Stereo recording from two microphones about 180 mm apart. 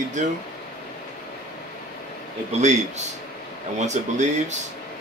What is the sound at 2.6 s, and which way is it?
Speech, 40° right (ahead or behind).